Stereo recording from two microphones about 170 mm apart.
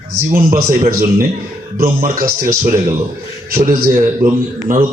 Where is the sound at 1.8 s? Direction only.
55° right (ahead or behind).